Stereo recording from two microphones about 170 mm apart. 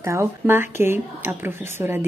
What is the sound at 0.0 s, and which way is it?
Speech, 15° right (ahead or behind).